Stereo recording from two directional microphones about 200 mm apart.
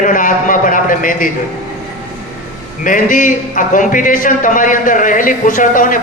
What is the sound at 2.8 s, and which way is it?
A man's voice, 40° left (ahead or behind).